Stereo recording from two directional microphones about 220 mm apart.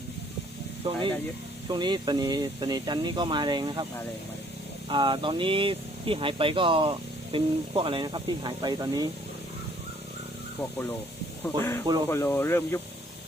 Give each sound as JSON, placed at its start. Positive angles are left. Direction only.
{"t": 0.8, "sound": "speech", "side_deg": -25}
{"t": 4.9, "sound": "speech", "side_deg": -20}
{"t": 10.6, "sound": "speech", "side_deg": 10}